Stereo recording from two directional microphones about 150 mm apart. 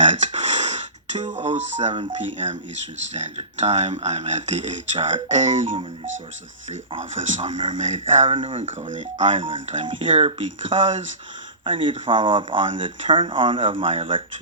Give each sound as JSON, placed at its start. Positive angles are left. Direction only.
{"t": 0.0, "sound": "speech", "side_deg": -50}
{"t": 6.7, "sound": "speech", "side_deg": -50}
{"t": 9.4, "sound": "speech", "side_deg": -35}